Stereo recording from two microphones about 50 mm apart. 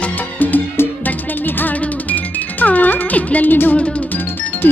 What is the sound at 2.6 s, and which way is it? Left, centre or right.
Music, left.